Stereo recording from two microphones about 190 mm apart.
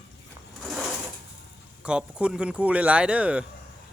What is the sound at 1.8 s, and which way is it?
Speech, 5° right (ahead or behind).